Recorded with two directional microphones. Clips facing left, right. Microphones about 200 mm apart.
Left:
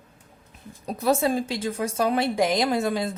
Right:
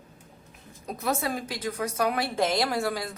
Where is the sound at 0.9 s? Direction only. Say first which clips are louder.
Left 7 dB; 30° left (ahead or behind).